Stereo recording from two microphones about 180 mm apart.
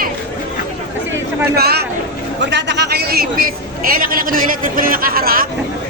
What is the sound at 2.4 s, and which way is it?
A man's voice, 80° right.